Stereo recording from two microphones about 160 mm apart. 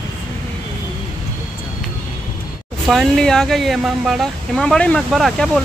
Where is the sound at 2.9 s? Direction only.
5° left (ahead or behind).